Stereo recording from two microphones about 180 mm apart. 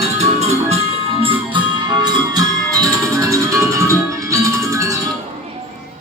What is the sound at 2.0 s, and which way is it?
Music, 20° right (ahead or behind).